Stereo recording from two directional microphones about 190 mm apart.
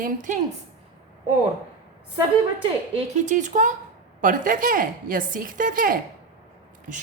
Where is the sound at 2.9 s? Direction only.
40° right (ahead or behind).